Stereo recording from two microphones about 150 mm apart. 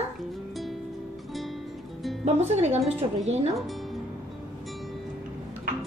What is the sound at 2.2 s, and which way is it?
Speech, 45° right (ahead or behind).